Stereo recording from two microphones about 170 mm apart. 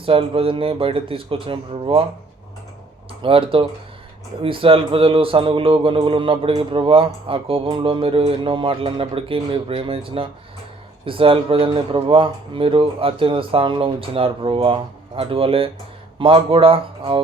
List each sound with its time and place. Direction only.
0.0 s a man's voice: 35° right (ahead or behind)
3.2 s a man's voice: 30° right (ahead or behind)